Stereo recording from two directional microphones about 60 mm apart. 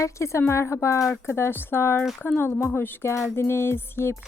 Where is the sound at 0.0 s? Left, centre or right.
Left.